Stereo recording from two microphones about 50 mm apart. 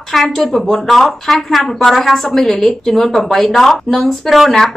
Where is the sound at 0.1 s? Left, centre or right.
Centre.